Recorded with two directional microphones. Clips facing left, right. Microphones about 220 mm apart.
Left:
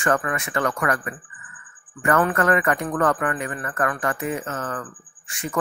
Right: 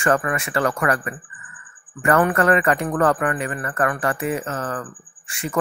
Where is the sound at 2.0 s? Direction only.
30° right (ahead or behind); by 3.6 s 15° right (ahead or behind).